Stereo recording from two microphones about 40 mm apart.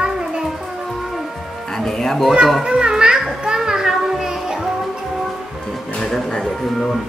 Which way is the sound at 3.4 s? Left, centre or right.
Centre.